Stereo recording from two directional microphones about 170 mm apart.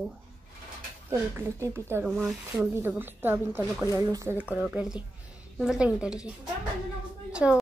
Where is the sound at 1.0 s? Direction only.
15° right (ahead or behind).